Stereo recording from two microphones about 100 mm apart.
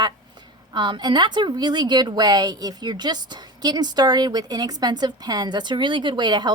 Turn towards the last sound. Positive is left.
turn(degrees=-50)  # may be behind; listen again after turning